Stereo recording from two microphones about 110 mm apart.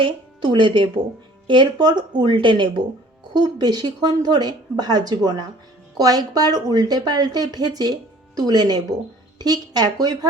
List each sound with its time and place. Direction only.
0.0 s a woman's voice: 45° right (ahead or behind)